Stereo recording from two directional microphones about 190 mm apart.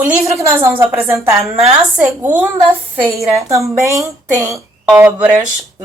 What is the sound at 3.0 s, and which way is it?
Speech, 15° right (ahead or behind).